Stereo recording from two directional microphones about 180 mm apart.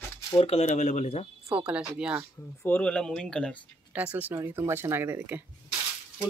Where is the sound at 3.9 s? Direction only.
10° right (ahead or behind).